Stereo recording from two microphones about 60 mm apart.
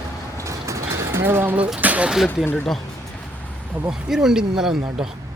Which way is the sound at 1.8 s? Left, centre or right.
Right.